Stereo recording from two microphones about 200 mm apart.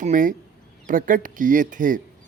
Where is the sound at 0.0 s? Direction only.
40° right (ahead or behind).